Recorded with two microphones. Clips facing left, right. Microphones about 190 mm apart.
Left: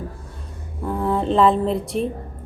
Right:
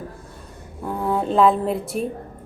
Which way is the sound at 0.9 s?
Centre (ahead or behind).